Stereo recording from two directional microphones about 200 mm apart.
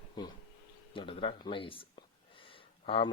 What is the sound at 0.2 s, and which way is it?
Speech, 20° left (ahead or behind).